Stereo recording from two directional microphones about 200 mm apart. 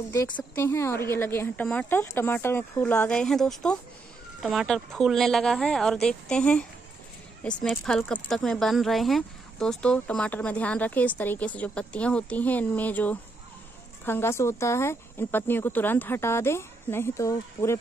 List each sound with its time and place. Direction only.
0.1 s a woman's voice: 10° left (ahead or behind)
7.6 s speech: centre (ahead or behind)